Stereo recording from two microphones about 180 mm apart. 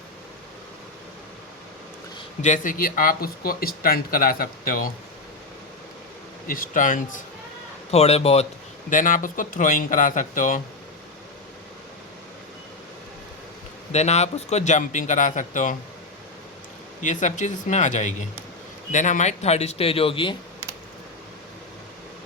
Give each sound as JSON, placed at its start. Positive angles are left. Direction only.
{"t": 2.4, "sound": "speech", "side_deg": 45}
{"t": 6.5, "sound": "speech", "side_deg": 50}
{"t": 7.9, "sound": "speech", "side_deg": 35}
{"t": 8.9, "sound": "speech", "side_deg": 45}
{"t": 13.9, "sound": "speech", "side_deg": 40}
{"t": 17.0, "sound": "speech", "side_deg": 45}